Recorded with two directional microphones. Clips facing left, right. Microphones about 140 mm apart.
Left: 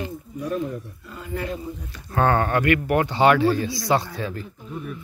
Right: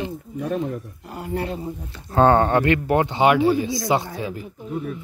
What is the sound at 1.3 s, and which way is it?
Speech, 30° right (ahead or behind).